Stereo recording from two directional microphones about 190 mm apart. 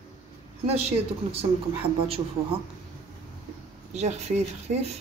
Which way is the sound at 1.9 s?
30° right (ahead or behind).